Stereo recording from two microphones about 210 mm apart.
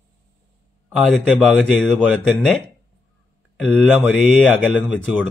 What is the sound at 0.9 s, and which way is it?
Speech, centre (ahead or behind).